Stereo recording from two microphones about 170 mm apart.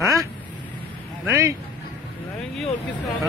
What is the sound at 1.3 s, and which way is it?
Speech, 20° right (ahead or behind).